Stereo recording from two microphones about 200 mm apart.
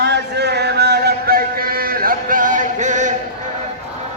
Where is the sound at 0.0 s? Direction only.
55° right (ahead or behind); by 3.1 s 40° right (ahead or behind).